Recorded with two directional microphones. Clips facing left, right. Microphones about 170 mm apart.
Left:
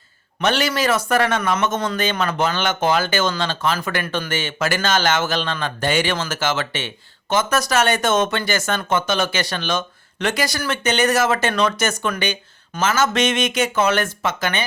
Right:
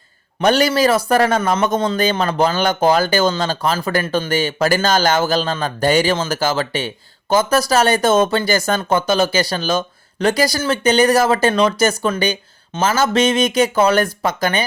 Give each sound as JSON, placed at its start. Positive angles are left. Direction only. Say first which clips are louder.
{"t": 0.3, "sound": "a man's voice", "louder": "right 5 dB", "side_deg": -40}